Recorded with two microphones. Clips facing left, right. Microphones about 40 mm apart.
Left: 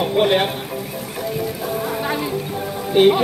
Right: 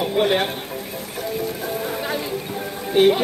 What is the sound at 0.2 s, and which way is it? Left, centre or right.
Speech, centre.